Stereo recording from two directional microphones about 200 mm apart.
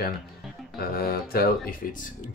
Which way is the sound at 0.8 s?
50° left (ahead or behind).